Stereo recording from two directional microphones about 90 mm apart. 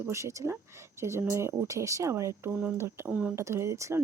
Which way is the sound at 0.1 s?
35° right (ahead or behind).